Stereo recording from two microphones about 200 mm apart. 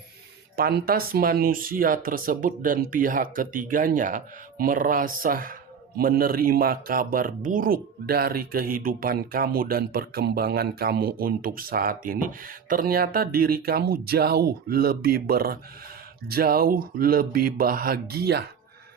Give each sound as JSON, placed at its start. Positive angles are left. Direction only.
{"t": 0.5, "sound": "speech", "side_deg": -50}